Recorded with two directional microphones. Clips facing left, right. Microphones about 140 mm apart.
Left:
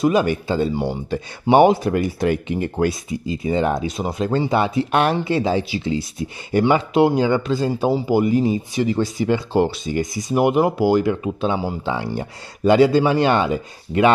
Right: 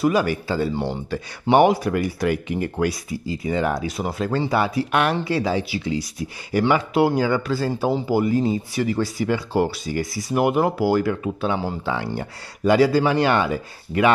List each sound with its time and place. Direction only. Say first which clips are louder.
0.0 s speech: left 2 dB; 20° left (ahead or behind)